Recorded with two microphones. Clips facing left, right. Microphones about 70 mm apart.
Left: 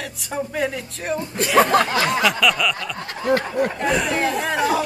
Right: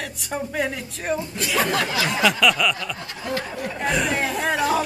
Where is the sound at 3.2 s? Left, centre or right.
Left.